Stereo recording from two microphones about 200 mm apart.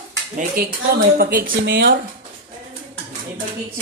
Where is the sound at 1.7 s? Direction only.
60° right (ahead or behind).